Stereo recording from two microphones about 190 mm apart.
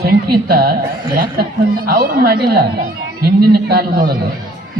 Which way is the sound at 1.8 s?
55° right (ahead or behind).